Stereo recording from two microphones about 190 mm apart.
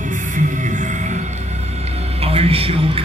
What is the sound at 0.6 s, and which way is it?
Music, 40° right (ahead or behind).